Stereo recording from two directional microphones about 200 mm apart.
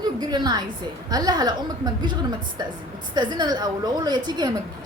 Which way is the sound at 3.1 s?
20° right (ahead or behind).